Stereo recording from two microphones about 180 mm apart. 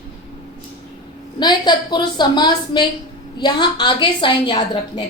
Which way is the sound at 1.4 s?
25° left (ahead or behind).